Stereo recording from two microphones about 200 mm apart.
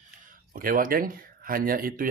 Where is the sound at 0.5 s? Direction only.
45° right (ahead or behind).